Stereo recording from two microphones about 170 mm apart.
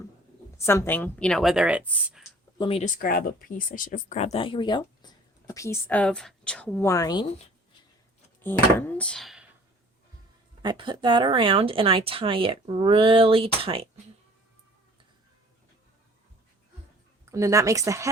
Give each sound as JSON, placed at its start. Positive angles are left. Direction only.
{"t": 0.6, "sound": "a woman's voice", "side_deg": 15}
{"t": 2.6, "sound": "speech", "side_deg": 35}
{"t": 2.8, "sound": "speech", "side_deg": 55}
{"t": 5.5, "sound": "a woman's voice", "side_deg": 15}
{"t": 8.4, "sound": "a woman's voice", "side_deg": 10}
{"t": 10.6, "sound": "speech", "side_deg": -25}
{"t": 17.3, "sound": "speech", "side_deg": -20}